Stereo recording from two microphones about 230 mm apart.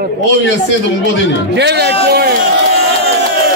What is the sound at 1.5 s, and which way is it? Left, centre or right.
Speech, right.